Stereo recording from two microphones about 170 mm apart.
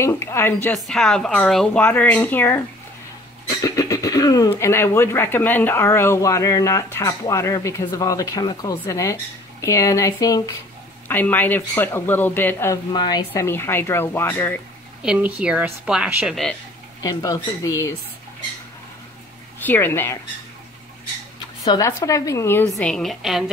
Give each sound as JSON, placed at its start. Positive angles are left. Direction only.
{"t": 0.0, "sound": "speech", "side_deg": 15}
{"t": 3.6, "sound": "speech", "side_deg": 20}
{"t": 12.9, "sound": "speech", "side_deg": 25}
{"t": 13.3, "sound": "speech", "side_deg": 15}
{"t": 15.0, "sound": "a woman's voice", "side_deg": -5}
{"t": 17.0, "sound": "speech", "side_deg": 20}
{"t": 19.6, "sound": "speech", "side_deg": 10}
{"t": 21.6, "sound": "speech", "side_deg": 20}
{"t": 22.8, "sound": "a woman's voice", "side_deg": 5}